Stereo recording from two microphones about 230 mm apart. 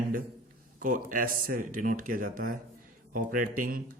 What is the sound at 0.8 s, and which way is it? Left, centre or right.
Speech, right.